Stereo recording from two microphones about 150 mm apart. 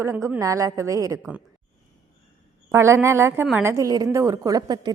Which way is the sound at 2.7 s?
15° right (ahead or behind).